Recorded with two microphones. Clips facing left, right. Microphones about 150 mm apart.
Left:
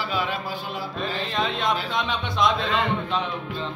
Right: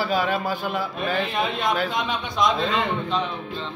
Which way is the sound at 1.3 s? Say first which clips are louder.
Right 1 dB; 5° right (ahead or behind).